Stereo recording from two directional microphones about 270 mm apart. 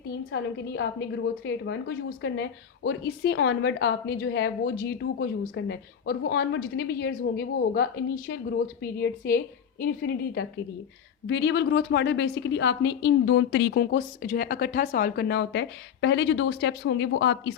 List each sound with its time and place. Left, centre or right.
0.1 s a woman's voice: left